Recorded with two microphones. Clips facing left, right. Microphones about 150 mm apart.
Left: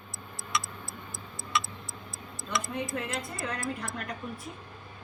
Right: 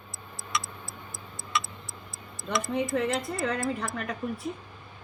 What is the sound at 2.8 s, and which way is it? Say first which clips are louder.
Speech: right 7 dB; centre (ahead or behind).